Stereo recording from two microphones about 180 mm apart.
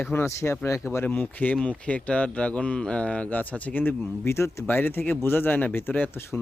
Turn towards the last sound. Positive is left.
turn(degrees=15)  # may be behind; listen again after turning